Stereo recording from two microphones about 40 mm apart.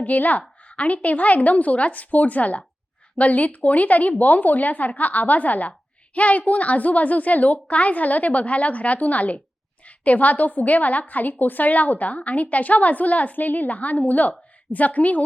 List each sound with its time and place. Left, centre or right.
0.0 s a woman's voice: left